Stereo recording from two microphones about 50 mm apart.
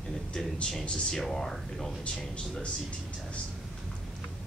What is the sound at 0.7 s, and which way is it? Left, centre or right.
Speech, centre.